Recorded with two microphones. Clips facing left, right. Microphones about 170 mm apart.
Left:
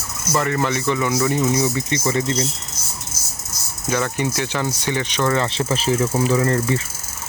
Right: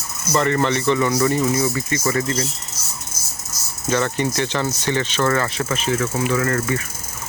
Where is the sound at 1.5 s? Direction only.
20° left (ahead or behind).